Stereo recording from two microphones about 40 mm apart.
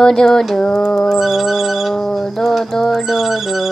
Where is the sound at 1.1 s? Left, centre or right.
Centre.